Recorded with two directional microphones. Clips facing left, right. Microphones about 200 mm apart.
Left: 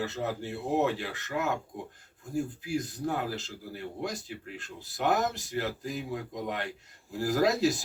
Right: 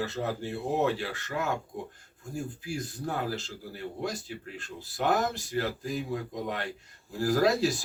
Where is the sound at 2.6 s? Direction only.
20° left (ahead or behind).